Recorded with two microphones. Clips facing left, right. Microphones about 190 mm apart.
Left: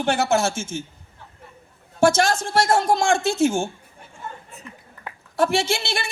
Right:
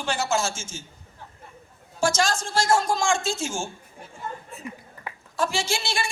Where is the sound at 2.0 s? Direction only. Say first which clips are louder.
Left 6 dB; 60° left (ahead or behind).